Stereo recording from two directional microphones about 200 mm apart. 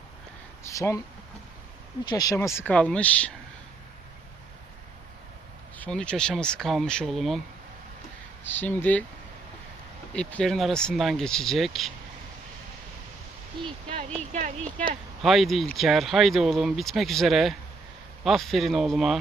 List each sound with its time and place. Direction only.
0.6 s a sound: 15° left (ahead or behind)
2.0 s speech: 20° left (ahead or behind)
5.7 s speech: 5° left (ahead or behind)
8.4 s speech: 10° left (ahead or behind)
10.2 s speech: 5° left (ahead or behind)
13.6 s speech: 25° right (ahead or behind)
15.2 s speech: centre (ahead or behind)